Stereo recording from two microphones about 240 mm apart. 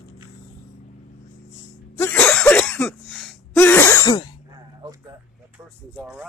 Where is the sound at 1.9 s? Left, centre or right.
Centre.